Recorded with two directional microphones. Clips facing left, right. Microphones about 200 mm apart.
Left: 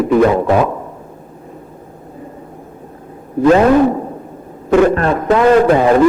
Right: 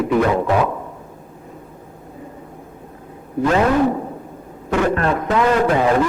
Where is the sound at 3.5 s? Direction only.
40° left (ahead or behind).